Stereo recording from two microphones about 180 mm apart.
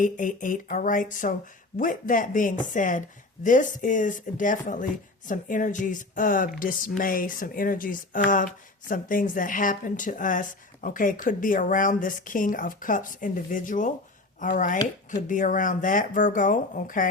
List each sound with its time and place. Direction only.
0.0 s speech: 45° left (ahead or behind)